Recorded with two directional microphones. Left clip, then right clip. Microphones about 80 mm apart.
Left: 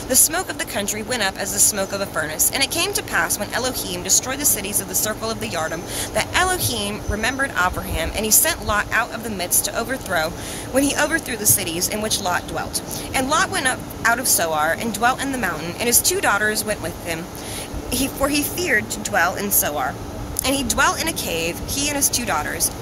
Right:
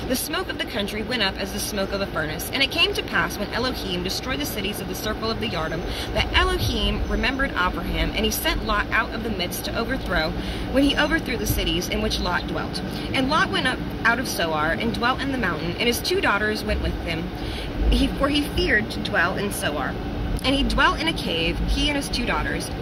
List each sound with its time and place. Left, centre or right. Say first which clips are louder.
0.1 s speech: left 6 dB; left